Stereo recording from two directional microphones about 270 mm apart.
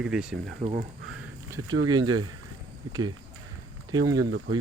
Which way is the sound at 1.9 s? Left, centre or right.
Centre.